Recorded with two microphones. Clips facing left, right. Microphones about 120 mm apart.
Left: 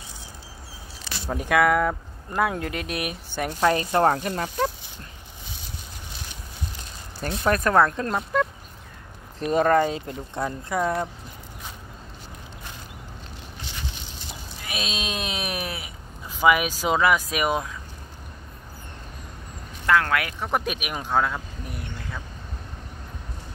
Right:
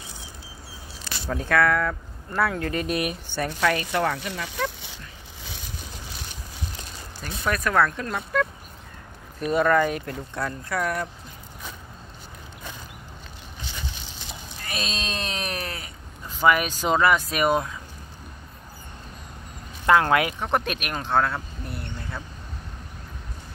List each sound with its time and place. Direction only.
1.2 s speech: 15° left (ahead or behind)
3.6 s speech: 30° left (ahead or behind)
4.8 s dog: 90° right
7.2 s speech: 40° left (ahead or behind)
7.6 s speech: 25° left (ahead or behind)
9.4 s speech: 40° left (ahead or behind); by 11.1 s 20° left (ahead or behind)
14.6 s speech: 5° left (ahead or behind)
19.9 s speech: 25° right (ahead or behind)
20.3 s speech: 5° left (ahead or behind)